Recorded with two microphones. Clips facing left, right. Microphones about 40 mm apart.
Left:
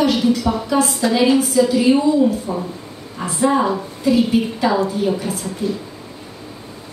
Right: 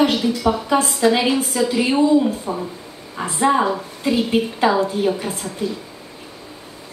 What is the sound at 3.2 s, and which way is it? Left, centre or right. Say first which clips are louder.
A woman's voice: even; right.